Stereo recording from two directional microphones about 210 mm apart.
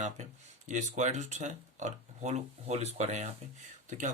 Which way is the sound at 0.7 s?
35° right (ahead or behind).